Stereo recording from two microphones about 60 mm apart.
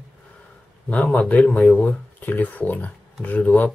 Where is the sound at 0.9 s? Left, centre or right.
Left.